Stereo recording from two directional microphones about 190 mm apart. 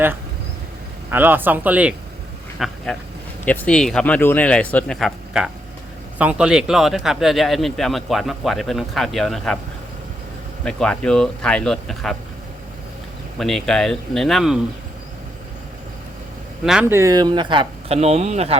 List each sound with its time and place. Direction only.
1.1 s speech: 10° right (ahead or behind)
10.6 s speech: 5° left (ahead or behind)
13.4 s speech: centre (ahead or behind)
16.9 s speech: 15° right (ahead or behind); by 18.5 s 35° right (ahead or behind)